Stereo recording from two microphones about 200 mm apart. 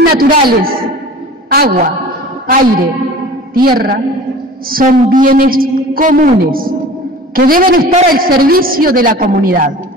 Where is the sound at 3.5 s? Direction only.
50° right (ahead or behind).